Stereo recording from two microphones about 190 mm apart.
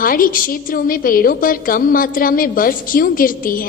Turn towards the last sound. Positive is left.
turn(degrees=50)  # may be behind; listen again after turning